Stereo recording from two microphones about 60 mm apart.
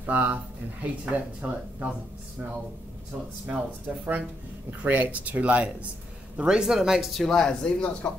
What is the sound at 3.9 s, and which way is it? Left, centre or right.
Speech, centre.